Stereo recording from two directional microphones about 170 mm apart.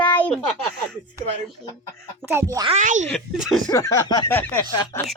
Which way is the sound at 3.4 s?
Centre (ahead or behind).